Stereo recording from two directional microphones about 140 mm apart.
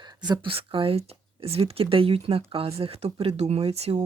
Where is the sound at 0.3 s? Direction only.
40° right (ahead or behind).